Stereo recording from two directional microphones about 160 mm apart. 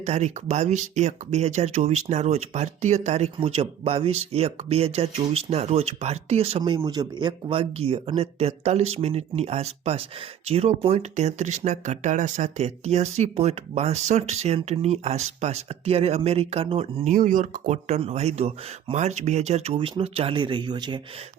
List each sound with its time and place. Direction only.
0.0 s speech: 45° right (ahead or behind)
6.6 s speech: 30° right (ahead or behind)
17.2 s speech: 50° right (ahead or behind); by 21.0 s 25° right (ahead or behind)